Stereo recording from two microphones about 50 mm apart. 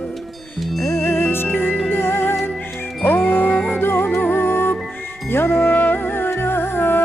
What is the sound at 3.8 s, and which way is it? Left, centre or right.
Music, left.